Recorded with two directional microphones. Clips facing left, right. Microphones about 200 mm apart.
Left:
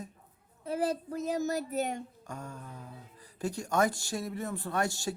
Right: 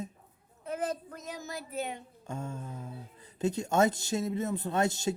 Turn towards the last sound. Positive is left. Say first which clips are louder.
# right 3 dB
turn(degrees=-20)  # may be behind; listen again after turning